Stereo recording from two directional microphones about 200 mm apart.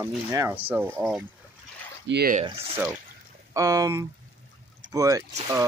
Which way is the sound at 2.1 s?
55° right (ahead or behind).